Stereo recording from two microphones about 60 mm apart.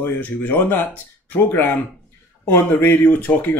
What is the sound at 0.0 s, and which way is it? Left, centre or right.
Speech, left.